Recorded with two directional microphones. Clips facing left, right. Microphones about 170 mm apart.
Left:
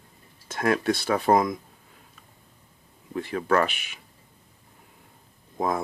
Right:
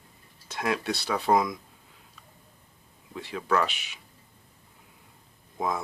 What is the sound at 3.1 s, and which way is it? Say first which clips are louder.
Speech: left 4 dB; 50° left (ahead or behind).